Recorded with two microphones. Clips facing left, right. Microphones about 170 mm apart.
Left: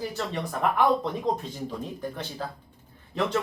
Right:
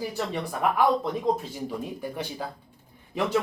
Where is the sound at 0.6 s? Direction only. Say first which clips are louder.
Even; 5° right (ahead or behind).